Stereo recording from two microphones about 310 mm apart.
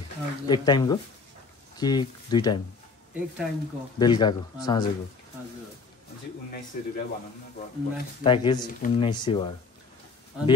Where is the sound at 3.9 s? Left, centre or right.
Centre.